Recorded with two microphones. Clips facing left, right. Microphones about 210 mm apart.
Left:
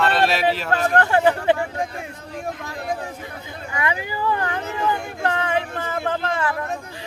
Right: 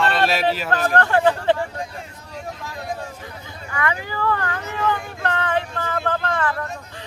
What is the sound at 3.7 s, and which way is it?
Speech, 15° left (ahead or behind).